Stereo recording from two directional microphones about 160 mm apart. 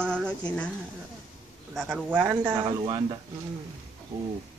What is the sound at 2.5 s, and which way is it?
Speech, 25° right (ahead or behind).